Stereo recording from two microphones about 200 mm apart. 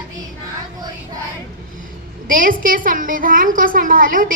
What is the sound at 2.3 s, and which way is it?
A woman's voice, 45° right (ahead or behind).